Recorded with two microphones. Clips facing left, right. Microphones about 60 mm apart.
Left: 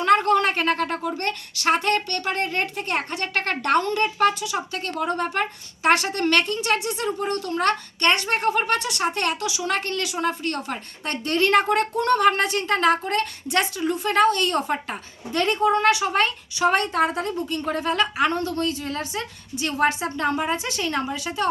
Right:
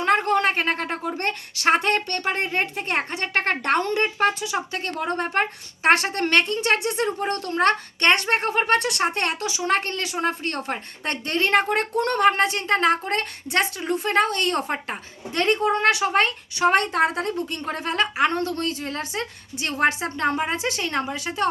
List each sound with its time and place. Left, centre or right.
0.0 s a woman's voice: centre; by 21.5 s right